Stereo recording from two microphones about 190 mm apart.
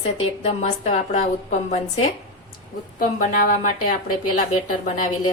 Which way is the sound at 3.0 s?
45° left (ahead or behind).